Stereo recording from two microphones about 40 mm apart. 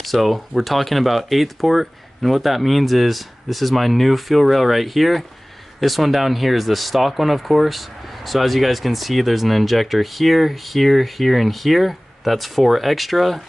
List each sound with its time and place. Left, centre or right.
0.0 s speech: centre